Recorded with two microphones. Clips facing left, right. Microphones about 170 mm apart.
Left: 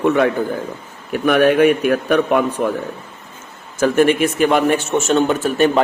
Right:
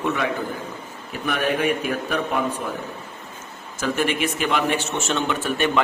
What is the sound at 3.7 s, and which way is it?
A man's voice, 50° left (ahead or behind).